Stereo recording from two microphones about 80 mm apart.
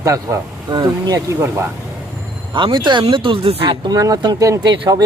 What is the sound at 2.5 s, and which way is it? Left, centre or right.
Speech, right.